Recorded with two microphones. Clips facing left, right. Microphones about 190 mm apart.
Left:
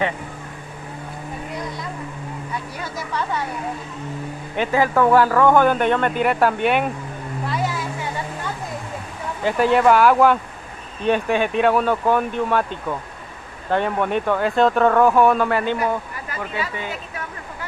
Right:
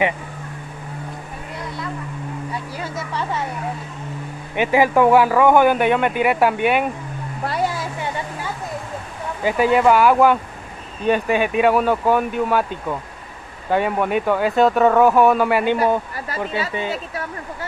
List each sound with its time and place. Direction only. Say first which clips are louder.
4.6 s speech: right 3 dB; 10° right (ahead or behind)
9.4 s speech: right 1 dB; 5° right (ahead or behind)
13.7 s speech: right 1 dB; 5° right (ahead or behind)
15.8 s speech: right 4 dB; 30° right (ahead or behind)